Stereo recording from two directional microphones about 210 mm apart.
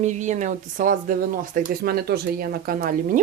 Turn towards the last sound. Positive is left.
turn(degrees=-45)  # may be behind; listen again after turning